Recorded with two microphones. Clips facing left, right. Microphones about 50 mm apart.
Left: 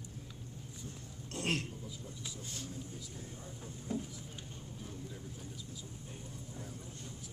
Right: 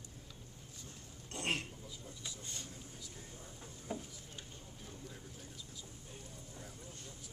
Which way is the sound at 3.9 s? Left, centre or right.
Centre.